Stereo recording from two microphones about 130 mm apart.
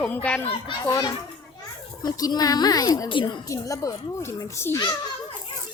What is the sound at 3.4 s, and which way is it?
A child's voice, 25° left (ahead or behind).